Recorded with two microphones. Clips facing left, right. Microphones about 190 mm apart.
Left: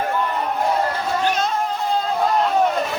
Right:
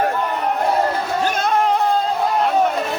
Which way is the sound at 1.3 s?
55° right (ahead or behind).